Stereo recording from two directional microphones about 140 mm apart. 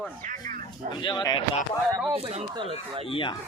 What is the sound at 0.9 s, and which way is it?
Speech, 35° left (ahead or behind).